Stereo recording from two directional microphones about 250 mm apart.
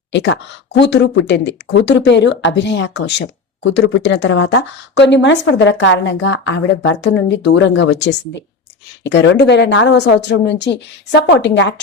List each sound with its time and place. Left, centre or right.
0.1 s speech: left